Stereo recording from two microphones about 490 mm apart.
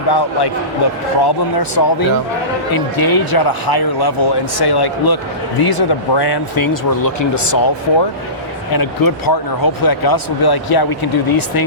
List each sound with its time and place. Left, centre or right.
0.1 s speech: left
8.7 s speech: left